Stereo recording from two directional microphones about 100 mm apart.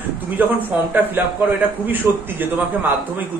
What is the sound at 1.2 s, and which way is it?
A man's voice, 20° right (ahead or behind).